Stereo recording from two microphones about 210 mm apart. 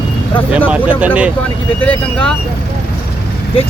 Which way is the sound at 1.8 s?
5° left (ahead or behind).